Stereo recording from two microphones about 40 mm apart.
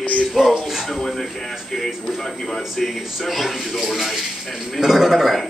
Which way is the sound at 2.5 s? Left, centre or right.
Centre.